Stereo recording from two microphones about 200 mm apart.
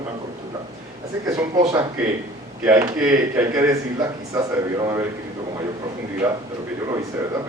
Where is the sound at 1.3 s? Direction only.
20° right (ahead or behind).